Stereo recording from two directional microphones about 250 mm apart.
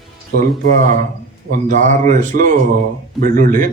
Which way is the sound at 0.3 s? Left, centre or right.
Right.